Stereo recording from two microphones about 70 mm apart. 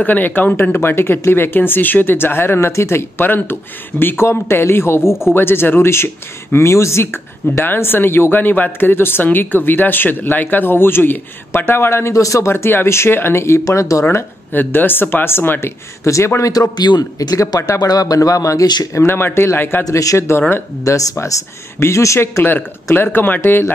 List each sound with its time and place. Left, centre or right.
0.0 s speech: left
5.0 s speech: centre
5.3 s speech: left
13.7 s speech: left
14.5 s speech: left
16.0 s speech: left
17.7 s speech: left
18.9 s speech: left
19.8 s speech: left
20.9 s speech: left
23.1 s speech: left